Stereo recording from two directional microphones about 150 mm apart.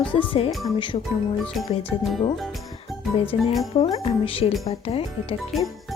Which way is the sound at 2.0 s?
Centre (ahead or behind).